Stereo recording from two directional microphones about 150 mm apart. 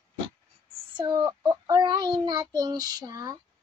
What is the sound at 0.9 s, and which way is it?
Child singing, 25° right (ahead or behind).